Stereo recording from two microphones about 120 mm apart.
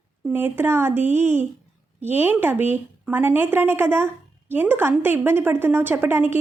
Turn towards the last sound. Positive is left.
turn(degrees=-20)  # may be behind; listen again after turning